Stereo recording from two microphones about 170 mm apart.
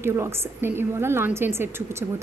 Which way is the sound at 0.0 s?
15° right (ahead or behind).